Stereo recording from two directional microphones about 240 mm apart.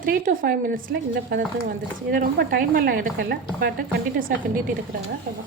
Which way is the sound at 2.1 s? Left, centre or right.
Right.